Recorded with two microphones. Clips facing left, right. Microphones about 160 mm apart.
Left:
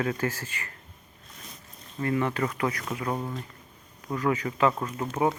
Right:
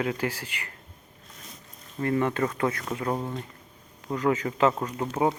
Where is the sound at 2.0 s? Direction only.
25° right (ahead or behind).